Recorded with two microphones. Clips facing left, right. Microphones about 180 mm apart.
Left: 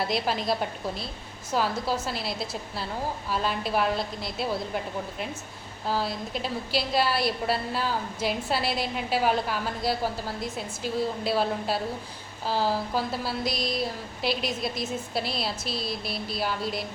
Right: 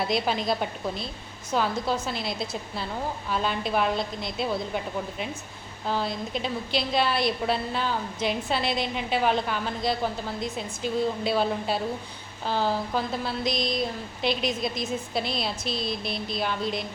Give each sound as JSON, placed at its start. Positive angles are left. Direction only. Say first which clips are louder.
{"t": 0.0, "sound": "a woman's voice", "louder": "right 1 dB", "side_deg": 0}
{"t": 5.9, "sound": "a woman's voice", "louder": "right 1 dB", "side_deg": 5}